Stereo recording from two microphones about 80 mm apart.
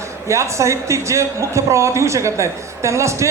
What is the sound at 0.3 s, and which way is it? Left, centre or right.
Speech, right.